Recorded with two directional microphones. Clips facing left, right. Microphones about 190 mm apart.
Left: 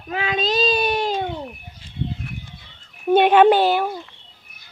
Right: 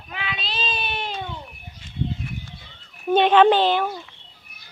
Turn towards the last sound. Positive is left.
turn(degrees=10)  # may be behind; listen again after turning